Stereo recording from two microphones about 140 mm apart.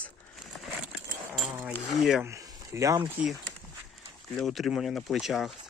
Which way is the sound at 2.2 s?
20° right (ahead or behind).